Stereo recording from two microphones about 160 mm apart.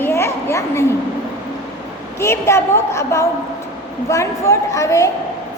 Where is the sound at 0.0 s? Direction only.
15° left (ahead or behind).